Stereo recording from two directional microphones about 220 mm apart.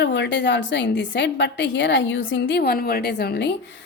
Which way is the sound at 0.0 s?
55° left (ahead or behind).